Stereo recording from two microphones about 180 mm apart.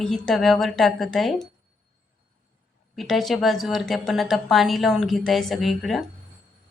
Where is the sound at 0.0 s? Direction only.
5° left (ahead or behind).